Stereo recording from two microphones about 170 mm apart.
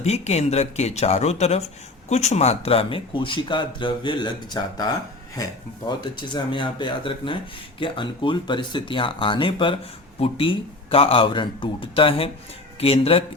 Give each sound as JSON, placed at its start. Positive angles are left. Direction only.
{"t": 0.0, "sound": "speech", "side_deg": 40}
{"t": 6.0, "sound": "speech", "side_deg": 25}